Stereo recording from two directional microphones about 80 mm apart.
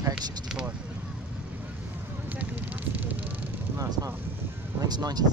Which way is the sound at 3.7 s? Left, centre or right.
Right.